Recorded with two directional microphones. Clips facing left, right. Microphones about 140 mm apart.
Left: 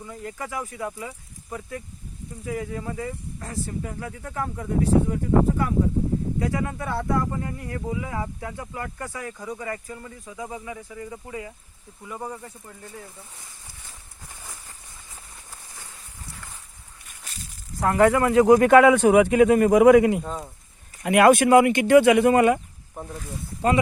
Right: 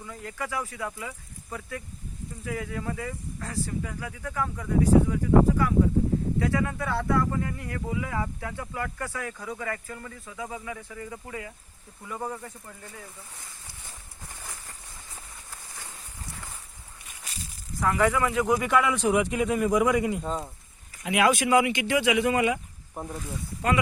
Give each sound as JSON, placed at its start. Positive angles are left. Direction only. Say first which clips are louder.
{"t": 0.0, "sound": "speech", "louder": "left 1 dB", "side_deg": 25}
{"t": 12.0, "sound": "speech", "louder": "even", "side_deg": 5}
{"t": 17.7, "sound": "speech", "louder": "left 5 dB", "side_deg": 45}
{"t": 18.5, "sound": "speech", "louder": "left 12 dB", "side_deg": 55}
{"t": 20.2, "sound": "speech", "louder": "right 1 dB", "side_deg": 0}
{"t": 21.0, "sound": "speech", "louder": "left 7 dB", "side_deg": 55}